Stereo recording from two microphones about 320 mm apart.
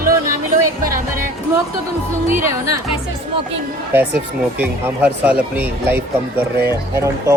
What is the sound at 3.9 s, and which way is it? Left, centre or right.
Speech, centre.